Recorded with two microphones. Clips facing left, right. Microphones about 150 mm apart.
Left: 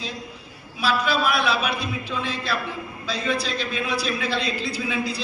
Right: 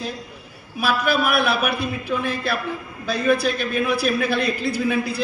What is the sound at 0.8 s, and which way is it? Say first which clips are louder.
A man's voice: right 2 dB; 55° right (ahead or behind).